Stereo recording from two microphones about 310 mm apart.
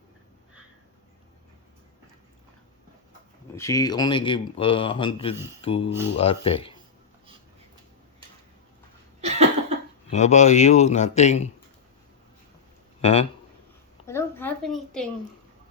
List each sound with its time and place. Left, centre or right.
3.5 s a man's voice: centre
9.2 s cough: right
10.1 s speech: left
13.0 s speech: left
14.1 s a sound: centre